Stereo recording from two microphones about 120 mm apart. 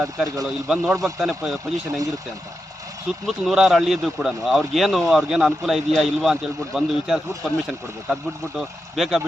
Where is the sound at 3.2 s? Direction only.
Centre (ahead or behind).